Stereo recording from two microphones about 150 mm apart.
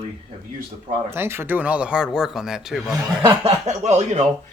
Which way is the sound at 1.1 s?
15° right (ahead or behind).